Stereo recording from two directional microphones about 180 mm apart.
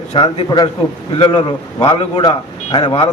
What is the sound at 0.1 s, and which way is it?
A man's voice, 30° left (ahead or behind).